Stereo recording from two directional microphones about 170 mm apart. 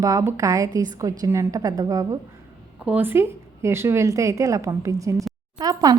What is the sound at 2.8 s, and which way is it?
A woman's voice, 10° right (ahead or behind).